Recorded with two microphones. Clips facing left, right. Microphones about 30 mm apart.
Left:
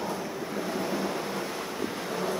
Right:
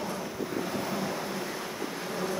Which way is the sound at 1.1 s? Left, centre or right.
Left.